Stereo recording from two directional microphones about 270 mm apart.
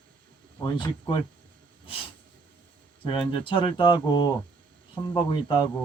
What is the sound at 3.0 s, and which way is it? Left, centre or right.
Speech, centre.